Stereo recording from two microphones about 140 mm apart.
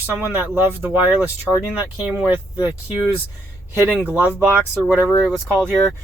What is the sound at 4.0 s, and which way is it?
Speech, 15° right (ahead or behind).